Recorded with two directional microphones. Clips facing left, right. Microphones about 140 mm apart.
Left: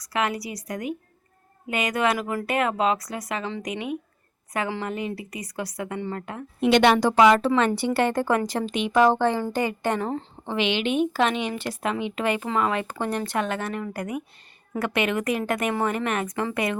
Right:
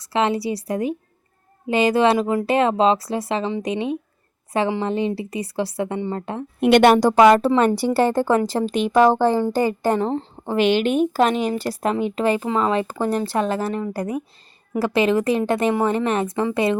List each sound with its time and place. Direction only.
0.0 s speech: 25° right (ahead or behind)
6.6 s a woman's voice: 55° right (ahead or behind); by 10.2 s 30° right (ahead or behind)
10.4 s a woman's voice: 45° right (ahead or behind); by 16.5 s 30° right (ahead or behind)